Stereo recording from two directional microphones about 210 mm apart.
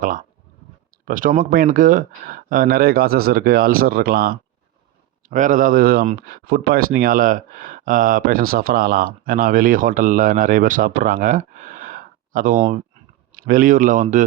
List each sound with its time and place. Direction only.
1.0 s speech: 40° right (ahead or behind)